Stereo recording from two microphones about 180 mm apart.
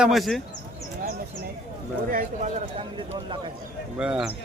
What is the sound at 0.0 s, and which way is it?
Speech, centre (ahead or behind).